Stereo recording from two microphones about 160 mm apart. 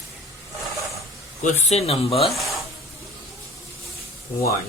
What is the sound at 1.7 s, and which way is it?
Speech, 40° left (ahead or behind).